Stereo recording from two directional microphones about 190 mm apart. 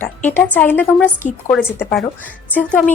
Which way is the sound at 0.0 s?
10° left (ahead or behind).